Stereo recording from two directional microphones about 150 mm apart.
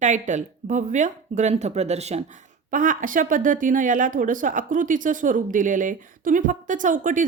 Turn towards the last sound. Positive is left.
turn(degrees=-60)  # may be behind; listen again after turning